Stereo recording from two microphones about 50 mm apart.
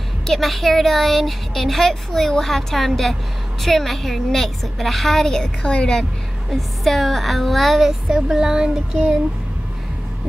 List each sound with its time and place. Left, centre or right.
0.3 s speech: centre; by 5.9 s left
6.5 s speech: centre
8.1 s speech: centre